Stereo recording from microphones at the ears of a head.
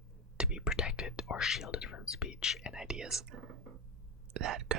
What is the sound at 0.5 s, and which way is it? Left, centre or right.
Speech, left.